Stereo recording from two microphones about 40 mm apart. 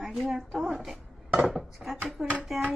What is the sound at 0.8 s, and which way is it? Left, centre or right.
Dishes, centre.